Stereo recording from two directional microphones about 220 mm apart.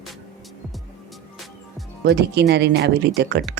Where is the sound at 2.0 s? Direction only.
50° right (ahead or behind).